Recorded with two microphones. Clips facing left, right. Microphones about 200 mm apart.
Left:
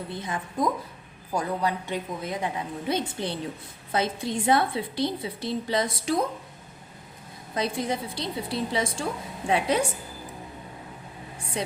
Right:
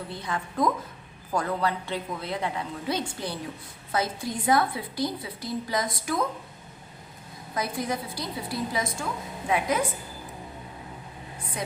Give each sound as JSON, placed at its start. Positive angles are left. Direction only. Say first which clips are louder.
{"t": 0.2, "sound": "a woman's voice", "louder": "right 1 dB", "side_deg": 15}
{"t": 7.5, "sound": "a woman's voice", "louder": "left 2 dB", "side_deg": 25}
{"t": 11.6, "sound": "a woman's voice", "louder": "left 3 dB", "side_deg": 30}